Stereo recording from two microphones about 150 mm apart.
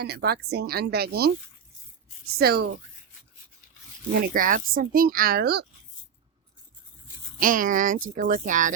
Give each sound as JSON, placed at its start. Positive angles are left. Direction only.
{"t": 0.0, "sound": "speech", "side_deg": -90}
{"t": 2.4, "sound": "speech", "side_deg": -90}
{"t": 4.1, "sound": "speech", "side_deg": -80}
{"t": 7.3, "sound": "speech", "side_deg": -65}